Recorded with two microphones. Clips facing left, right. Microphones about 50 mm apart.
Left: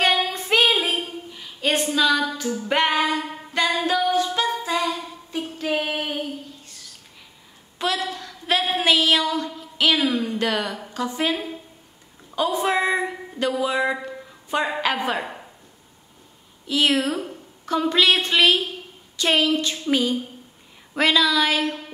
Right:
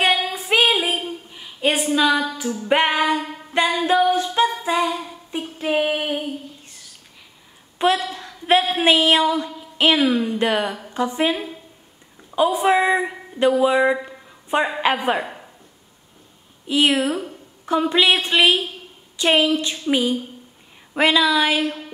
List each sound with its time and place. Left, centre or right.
0.0 s female singing: centre
2.7 s a woman's voice: right
3.7 s music: right
4.6 s a sound: right
7.8 s a sound: right
8.7 s a woman's voice: right
14.0 s a sound: right
14.8 s a woman's voice: right
16.6 s a woman's voice: right